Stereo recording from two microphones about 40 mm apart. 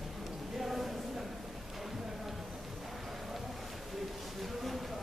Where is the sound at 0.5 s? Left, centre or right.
Centre.